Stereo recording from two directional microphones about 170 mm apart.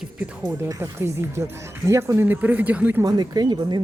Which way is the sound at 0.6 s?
15° right (ahead or behind).